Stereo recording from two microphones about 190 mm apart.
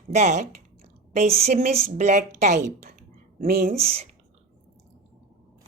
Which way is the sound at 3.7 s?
30° right (ahead or behind).